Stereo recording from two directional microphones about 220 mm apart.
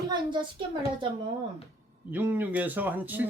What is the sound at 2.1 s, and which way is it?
Speech, 10° right (ahead or behind).